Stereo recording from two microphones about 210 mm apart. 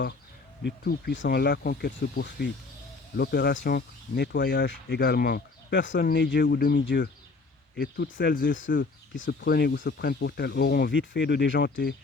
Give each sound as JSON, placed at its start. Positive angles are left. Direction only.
{"t": 0.6, "sound": "speech", "side_deg": 50}